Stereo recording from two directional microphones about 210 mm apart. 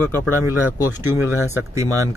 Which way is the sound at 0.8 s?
10° right (ahead or behind).